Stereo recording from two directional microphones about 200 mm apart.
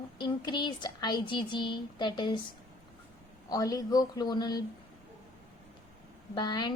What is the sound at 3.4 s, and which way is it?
A woman's voice, 20° left (ahead or behind).